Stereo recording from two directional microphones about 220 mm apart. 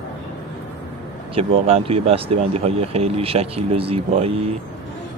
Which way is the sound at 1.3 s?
25° right (ahead or behind).